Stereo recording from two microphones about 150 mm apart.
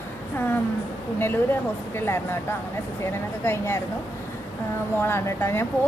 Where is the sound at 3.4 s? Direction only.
15° left (ahead or behind).